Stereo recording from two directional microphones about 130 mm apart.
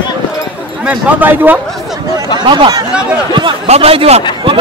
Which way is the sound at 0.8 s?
15° right (ahead or behind).